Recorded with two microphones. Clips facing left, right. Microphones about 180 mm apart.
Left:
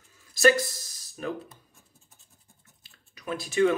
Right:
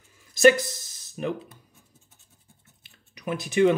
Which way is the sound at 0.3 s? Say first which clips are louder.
Right 4 dB; 20° right (ahead or behind).